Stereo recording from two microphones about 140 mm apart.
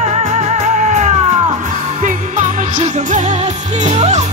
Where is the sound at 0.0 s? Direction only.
50° right (ahead or behind).